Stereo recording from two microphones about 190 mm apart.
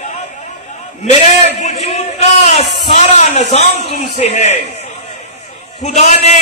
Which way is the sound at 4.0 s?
35° left (ahead or behind).